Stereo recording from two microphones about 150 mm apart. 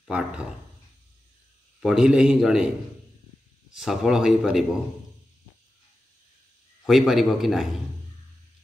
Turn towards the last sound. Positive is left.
turn(degrees=0)  # may be behind; listen again after turning